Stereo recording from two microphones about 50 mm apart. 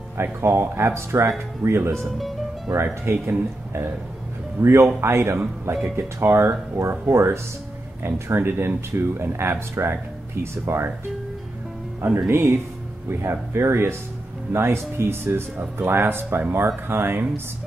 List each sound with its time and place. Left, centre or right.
0.2 s speech: right
2.0 s speech: centre
2.7 s speech: right
8.0 s speech: right
12.3 s speech: right